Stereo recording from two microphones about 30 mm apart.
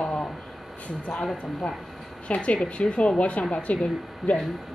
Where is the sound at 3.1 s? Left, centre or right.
Left.